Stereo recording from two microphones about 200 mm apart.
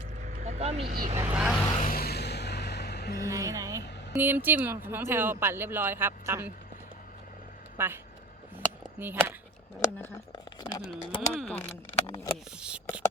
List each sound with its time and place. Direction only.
0.2 s vehicle: 40° right (ahead or behind)
0.9 s speech: 50° right (ahead or behind)
1.2 s vehicle: 5° right (ahead or behind)
1.8 s a sound: 45° left (ahead or behind)
3.2 s a sound: 15° right (ahead or behind)
4.1 s speech: 10° right (ahead or behind)
7.8 s speech: 10° right (ahead or behind)
8.5 s a sound: 10° right (ahead or behind)
10.0 s speech: 20° left (ahead or behind)
11.3 s speech: 5° left (ahead or behind)
12.0 s a sound: 15° left (ahead or behind)
12.5 s speech: 5° right (ahead or behind)